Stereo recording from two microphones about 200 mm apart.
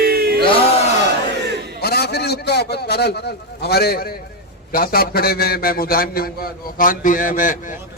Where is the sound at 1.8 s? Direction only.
55° left (ahead or behind).